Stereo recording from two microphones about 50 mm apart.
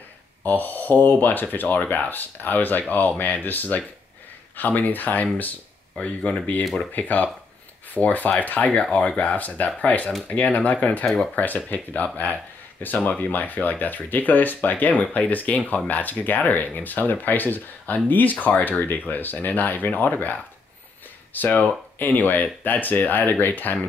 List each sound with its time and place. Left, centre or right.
0.4 s speech: left
6.6 s speech: centre
6.9 s speech: left